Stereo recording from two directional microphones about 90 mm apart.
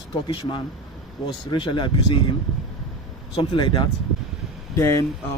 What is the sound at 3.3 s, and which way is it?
Speech, 55° left (ahead or behind).